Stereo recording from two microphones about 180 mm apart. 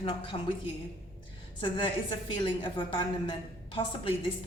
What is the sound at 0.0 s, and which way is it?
A woman's voice, 30° left (ahead or behind).